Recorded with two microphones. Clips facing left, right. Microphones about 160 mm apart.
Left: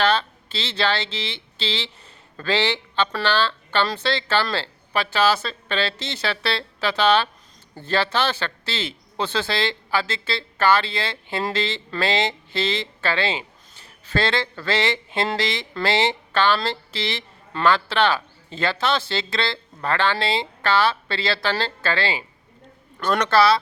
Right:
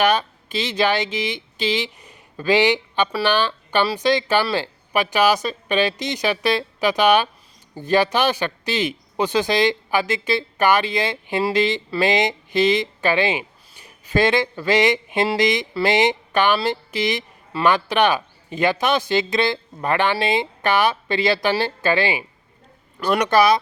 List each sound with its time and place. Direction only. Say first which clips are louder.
0.0 s speech: right 2 dB; 15° right (ahead or behind)